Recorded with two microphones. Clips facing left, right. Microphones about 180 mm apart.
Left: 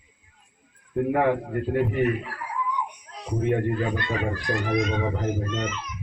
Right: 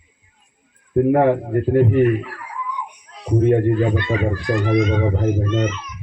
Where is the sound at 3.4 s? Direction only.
45° right (ahead or behind).